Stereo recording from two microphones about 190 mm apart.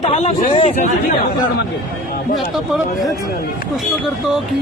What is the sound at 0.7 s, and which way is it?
Speech, 45° left (ahead or behind).